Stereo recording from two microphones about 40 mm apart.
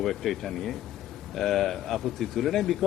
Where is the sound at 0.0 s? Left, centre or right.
Centre.